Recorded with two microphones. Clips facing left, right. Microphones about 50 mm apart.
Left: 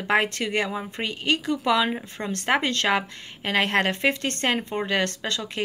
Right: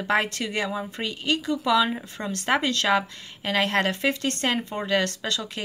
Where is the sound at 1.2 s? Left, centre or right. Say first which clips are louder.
Left 1 dB; left.